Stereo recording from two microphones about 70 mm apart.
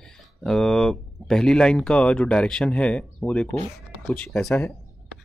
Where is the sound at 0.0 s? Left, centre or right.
Centre.